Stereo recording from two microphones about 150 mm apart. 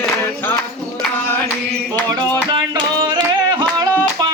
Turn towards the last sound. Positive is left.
turn(degrees=-25)  # may be behind; listen again after turning